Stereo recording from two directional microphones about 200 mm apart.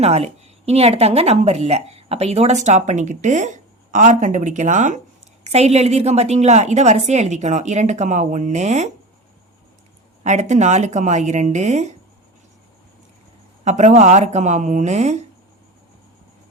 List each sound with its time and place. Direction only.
0.0 s speech: 35° right (ahead or behind)
10.2 s speech: 35° right (ahead or behind)
13.7 s speech: 35° right (ahead or behind)